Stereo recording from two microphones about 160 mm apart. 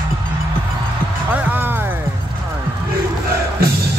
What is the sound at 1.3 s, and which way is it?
Music, 10° right (ahead or behind).